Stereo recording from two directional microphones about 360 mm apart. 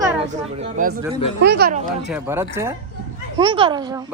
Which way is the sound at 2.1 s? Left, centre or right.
Centre.